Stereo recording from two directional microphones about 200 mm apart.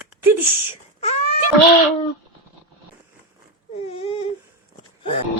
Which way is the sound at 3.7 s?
30° left (ahead or behind).